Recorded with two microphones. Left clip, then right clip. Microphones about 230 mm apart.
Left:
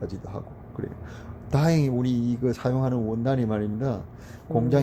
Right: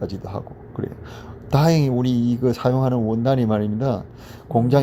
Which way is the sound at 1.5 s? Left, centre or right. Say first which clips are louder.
Right 6 dB; centre.